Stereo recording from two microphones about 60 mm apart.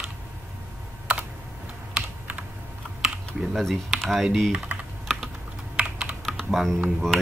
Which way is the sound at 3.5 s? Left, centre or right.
Centre.